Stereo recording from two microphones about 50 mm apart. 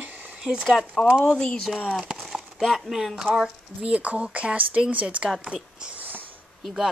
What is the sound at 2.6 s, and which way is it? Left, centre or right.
Speech, centre.